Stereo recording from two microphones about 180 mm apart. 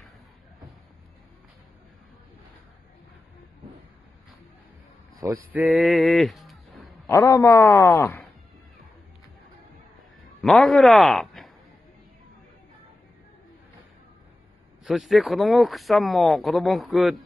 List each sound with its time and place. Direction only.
5.1 s speech: 15° right (ahead or behind); by 6.9 s centre (ahead or behind)
7.1 s speech: 20° left (ahead or behind)
10.4 s a man's voice: centre (ahead or behind)
14.9 s speech: centre (ahead or behind)